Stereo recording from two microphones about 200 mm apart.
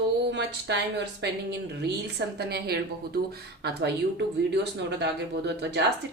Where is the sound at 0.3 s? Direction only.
60° right (ahead or behind).